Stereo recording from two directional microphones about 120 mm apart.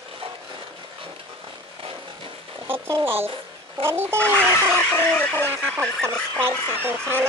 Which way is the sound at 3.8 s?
20° right (ahead or behind).